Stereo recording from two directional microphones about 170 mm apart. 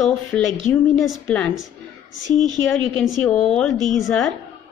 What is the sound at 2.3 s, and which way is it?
Speech, 45° left (ahead or behind).